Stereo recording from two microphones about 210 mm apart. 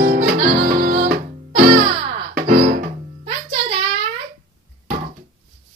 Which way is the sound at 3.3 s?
25° right (ahead or behind).